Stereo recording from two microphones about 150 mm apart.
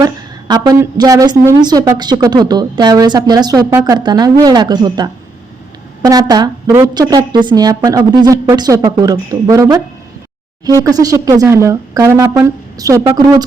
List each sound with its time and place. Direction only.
0.0 s a woman's voice: 25° right (ahead or behind)